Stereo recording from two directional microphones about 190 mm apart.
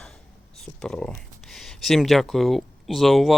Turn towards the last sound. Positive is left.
turn(degrees=0)  # may be behind; listen again after turning